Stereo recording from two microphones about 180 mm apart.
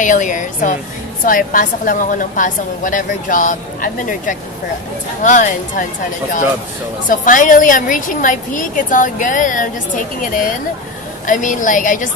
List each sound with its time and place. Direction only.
0.0 s a woman's voice: 45° left (ahead or behind)
7.1 s a woman's voice: 45° left (ahead or behind)